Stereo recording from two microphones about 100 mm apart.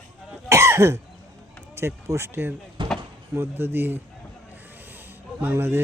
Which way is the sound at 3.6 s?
20° right (ahead or behind).